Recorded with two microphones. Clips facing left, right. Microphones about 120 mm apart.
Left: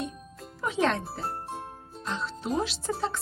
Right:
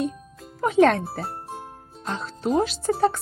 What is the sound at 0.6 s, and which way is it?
Speech, 55° right (ahead or behind).